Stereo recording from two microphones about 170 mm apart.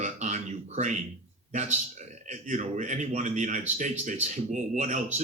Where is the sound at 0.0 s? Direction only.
45° right (ahead or behind).